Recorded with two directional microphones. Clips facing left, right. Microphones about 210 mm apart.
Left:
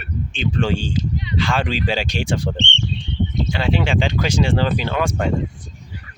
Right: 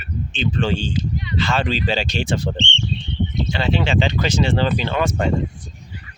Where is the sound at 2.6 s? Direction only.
60° left (ahead or behind).